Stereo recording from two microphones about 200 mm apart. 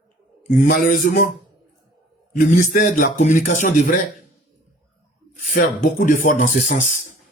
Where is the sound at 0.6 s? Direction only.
45° left (ahead or behind).